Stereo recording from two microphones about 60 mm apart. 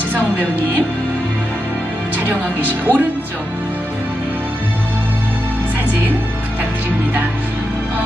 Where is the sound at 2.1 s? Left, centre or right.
Right.